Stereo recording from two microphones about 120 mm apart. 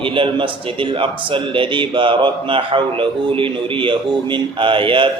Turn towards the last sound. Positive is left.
turn(degrees=-45)  # may be behind; listen again after turning